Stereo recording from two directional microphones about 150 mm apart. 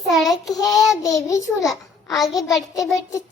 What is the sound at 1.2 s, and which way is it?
Speech, 20° left (ahead or behind).